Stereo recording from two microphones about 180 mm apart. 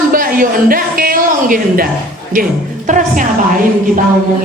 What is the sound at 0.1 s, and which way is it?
A woman's voice, 50° right (ahead or behind).